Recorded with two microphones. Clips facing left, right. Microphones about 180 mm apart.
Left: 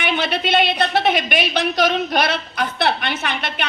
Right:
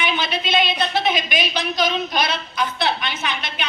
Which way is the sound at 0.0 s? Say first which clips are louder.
Left 3 dB; 65° left (ahead or behind).